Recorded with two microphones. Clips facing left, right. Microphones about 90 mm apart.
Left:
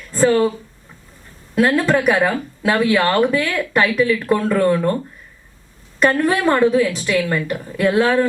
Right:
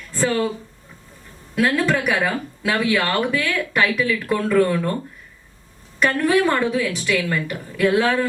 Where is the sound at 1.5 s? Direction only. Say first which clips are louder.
Left 4 dB; 35° left (ahead or behind).